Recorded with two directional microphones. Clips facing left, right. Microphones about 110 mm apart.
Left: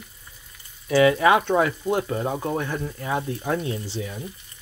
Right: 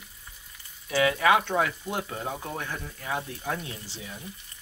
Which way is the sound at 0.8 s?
35° left (ahead or behind).